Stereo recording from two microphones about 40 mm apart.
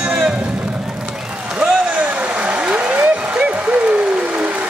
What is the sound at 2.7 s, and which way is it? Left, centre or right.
Applause, right.